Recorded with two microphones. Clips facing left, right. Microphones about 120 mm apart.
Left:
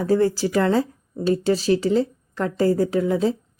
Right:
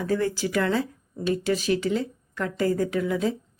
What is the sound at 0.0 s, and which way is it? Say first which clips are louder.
Speech: left 6 dB; 35° left (ahead or behind).